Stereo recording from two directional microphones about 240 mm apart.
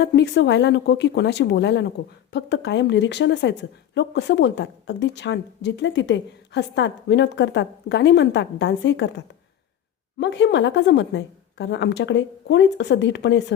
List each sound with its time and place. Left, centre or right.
0.0 s a woman's voice: left